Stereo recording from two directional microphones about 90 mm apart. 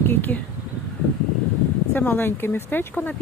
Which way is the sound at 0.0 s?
25° left (ahead or behind).